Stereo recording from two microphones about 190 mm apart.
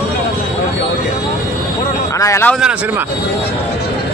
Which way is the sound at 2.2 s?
15° left (ahead or behind).